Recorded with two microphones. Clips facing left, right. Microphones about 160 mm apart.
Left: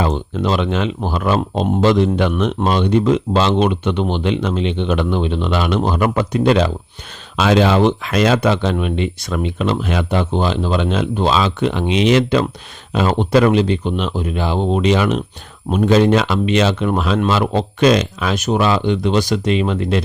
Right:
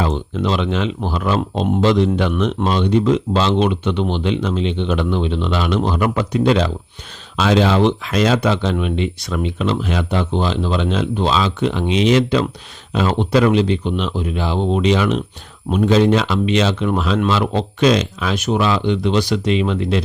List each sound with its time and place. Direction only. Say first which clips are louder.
0.0 s speech: left 1 dB; 50° left (ahead or behind)
12.9 s speech: left 2 dB; 45° left (ahead or behind)